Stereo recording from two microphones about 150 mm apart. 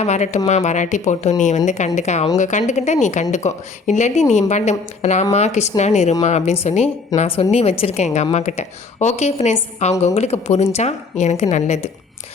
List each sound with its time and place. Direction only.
0.0 s a woman's voice: 50° left (ahead or behind)